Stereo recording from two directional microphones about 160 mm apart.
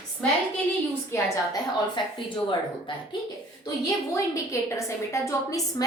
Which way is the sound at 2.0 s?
30° left (ahead or behind).